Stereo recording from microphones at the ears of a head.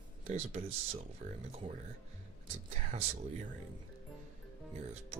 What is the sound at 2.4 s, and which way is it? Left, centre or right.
Speech, right.